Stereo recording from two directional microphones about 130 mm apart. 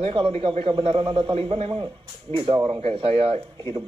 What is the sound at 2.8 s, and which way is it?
Speech, 45° right (ahead or behind).